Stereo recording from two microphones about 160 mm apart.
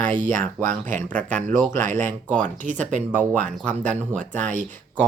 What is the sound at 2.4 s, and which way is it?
Speech, 55° right (ahead or behind).